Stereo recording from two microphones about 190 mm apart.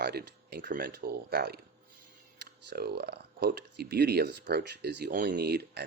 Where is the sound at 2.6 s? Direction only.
55° right (ahead or behind).